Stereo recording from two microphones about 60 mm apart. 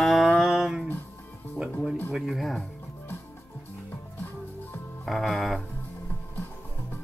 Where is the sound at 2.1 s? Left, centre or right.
Centre.